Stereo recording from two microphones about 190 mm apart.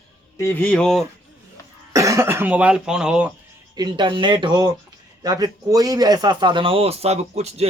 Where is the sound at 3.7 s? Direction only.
25° right (ahead or behind).